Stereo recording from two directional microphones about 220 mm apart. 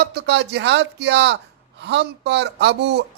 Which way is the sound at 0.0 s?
50° right (ahead or behind).